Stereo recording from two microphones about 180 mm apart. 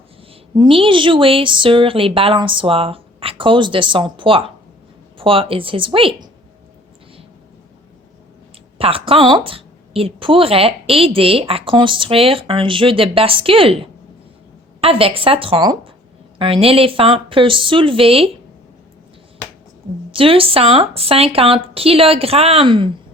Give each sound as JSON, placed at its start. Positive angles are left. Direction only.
{"t": 0.5, "sound": "speech", "side_deg": -25}
{"t": 8.8, "sound": "a woman's voice", "side_deg": -30}
{"t": 20.1, "sound": "a woman's voice", "side_deg": -30}